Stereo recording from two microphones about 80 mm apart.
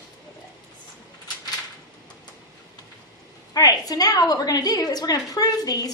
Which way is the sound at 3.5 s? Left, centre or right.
Left.